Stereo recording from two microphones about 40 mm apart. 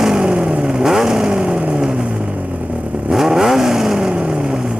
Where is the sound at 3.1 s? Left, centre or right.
Centre.